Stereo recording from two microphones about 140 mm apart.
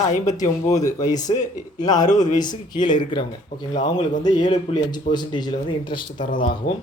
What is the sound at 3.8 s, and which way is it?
Speech, 60° left (ahead or behind).